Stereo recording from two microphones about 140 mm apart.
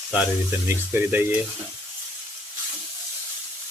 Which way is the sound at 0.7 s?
15° right (ahead or behind).